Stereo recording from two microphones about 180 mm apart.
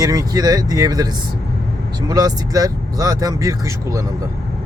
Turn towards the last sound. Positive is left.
turn(degrees=-20)  # may be behind; listen again after turning